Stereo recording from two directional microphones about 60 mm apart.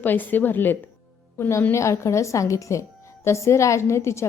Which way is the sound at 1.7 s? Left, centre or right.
Left.